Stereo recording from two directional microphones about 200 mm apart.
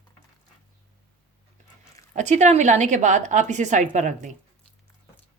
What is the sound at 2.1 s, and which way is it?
A woman's voice, 35° right (ahead or behind).